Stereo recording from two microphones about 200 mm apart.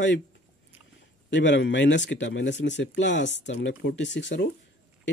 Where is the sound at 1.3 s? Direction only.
65° left (ahead or behind).